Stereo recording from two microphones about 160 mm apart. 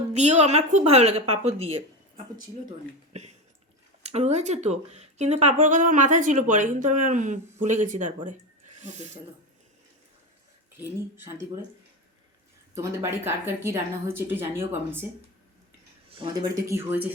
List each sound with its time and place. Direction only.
0.1 s speech: 45° right (ahead or behind)
2.1 s speech: 55° right (ahead or behind)
3.1 s a sound: 45° right (ahead or behind)
4.0 s speech: 45° right (ahead or behind)
12.7 s a woman's voice: 15° right (ahead or behind)
16.1 s speech: 30° right (ahead or behind); by 17.1 s 15° right (ahead or behind)